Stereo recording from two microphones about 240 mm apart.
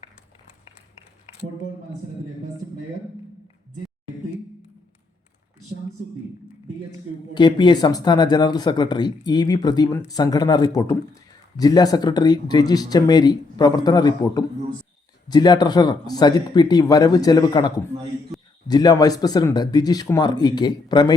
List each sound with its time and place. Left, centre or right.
7.3 s speech: centre
18.7 s speech: centre